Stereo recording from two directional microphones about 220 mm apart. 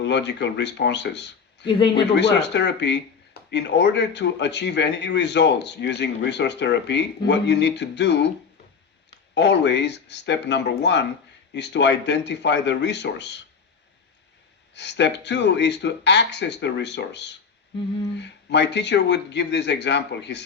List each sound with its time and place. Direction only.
0.0 s speech: 55° left (ahead or behind)
9.3 s speech: 50° left (ahead or behind)
14.8 s speech: 50° left (ahead or behind)